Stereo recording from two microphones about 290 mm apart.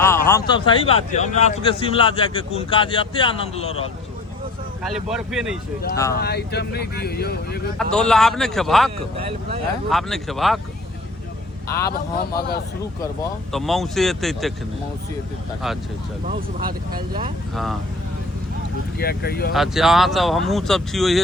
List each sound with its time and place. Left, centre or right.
0.0 s speech: centre
5.0 s speech: centre
6.1 s speech: left
7.8 s speech: centre
9.9 s speech: centre
11.9 s speech: left
13.5 s speech: centre
16.2 s speech: right
17.5 s speech: centre
18.9 s speech: left
19.5 s speech: centre